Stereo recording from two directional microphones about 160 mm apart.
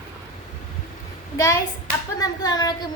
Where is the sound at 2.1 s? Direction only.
25° left (ahead or behind).